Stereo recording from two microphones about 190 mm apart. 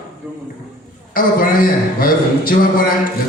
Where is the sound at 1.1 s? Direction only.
50° left (ahead or behind).